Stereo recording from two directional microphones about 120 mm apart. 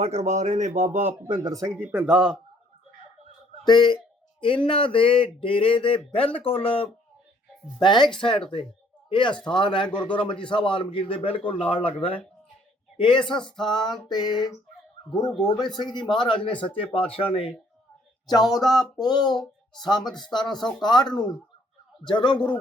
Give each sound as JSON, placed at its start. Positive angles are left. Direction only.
{"t": 0.0, "sound": "speech", "side_deg": -65}
{"t": 1.4, "sound": "speech", "side_deg": -30}
{"t": 1.8, "sound": "speech", "side_deg": -15}
{"t": 3.6, "sound": "speech", "side_deg": 40}
{"t": 7.8, "sound": "speech", "side_deg": 40}
{"t": 10.0, "sound": "speech", "side_deg": 10}
{"t": 10.5, "sound": "speech", "side_deg": 45}
{"t": 15.5, "sound": "speech", "side_deg": 35}
{"t": 18.5, "sound": "speech", "side_deg": 35}
{"t": 20.6, "sound": "speech", "side_deg": 5}
{"t": 20.8, "sound": "speech", "side_deg": 35}